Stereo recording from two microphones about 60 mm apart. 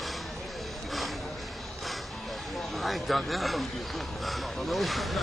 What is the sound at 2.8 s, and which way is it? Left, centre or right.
Speech, centre.